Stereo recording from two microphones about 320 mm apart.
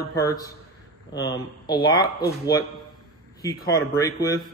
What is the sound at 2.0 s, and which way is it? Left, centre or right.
Speech, left.